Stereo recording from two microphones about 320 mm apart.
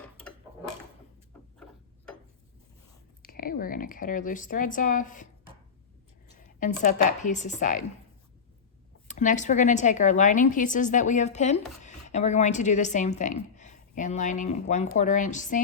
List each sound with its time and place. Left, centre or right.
3.2 s a woman's voice: left
6.6 s a woman's voice: left
9.0 s a woman's voice: left